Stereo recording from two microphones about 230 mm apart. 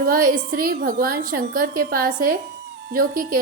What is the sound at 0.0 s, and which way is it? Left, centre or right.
A woman's voice, right.